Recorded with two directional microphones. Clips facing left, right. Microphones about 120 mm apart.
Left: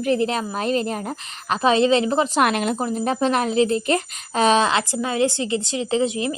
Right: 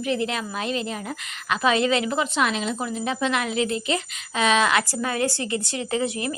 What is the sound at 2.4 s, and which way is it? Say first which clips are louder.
Speech: left 4 dB; 55° left (ahead or behind).